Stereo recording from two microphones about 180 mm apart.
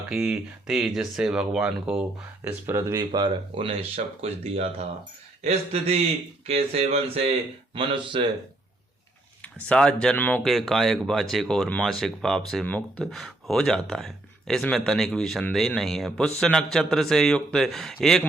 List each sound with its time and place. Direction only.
0.1 s speech: centre (ahead or behind); by 8.3 s 25° right (ahead or behind)
9.4 s speech: 5° left (ahead or behind)